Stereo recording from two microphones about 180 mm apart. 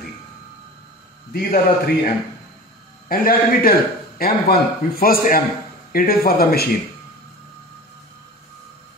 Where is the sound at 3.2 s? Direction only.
55° left (ahead or behind).